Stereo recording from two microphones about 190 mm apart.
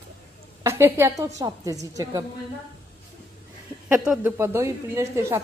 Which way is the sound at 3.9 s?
5° right (ahead or behind).